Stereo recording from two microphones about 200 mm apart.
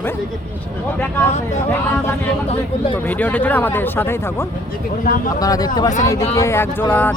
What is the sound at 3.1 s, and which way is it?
Speech, 10° left (ahead or behind).